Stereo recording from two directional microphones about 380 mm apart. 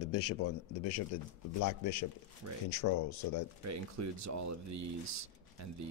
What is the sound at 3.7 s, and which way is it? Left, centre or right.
Speech, right.